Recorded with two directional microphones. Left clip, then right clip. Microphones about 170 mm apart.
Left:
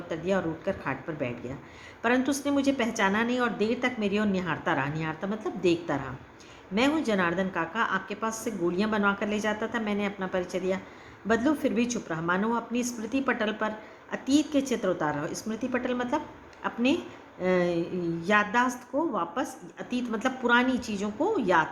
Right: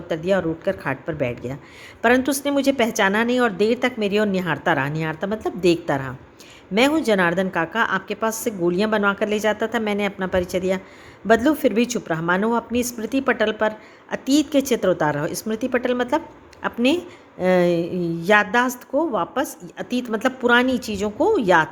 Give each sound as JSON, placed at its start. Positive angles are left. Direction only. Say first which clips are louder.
{"t": 0.1, "sound": "a woman's voice", "louder": "right 8 dB", "side_deg": -50}